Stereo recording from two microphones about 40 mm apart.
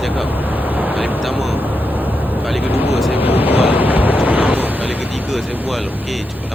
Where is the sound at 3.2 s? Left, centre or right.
Right.